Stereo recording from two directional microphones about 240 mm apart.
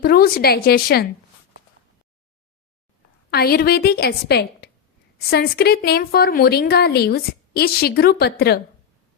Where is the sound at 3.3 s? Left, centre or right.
Left.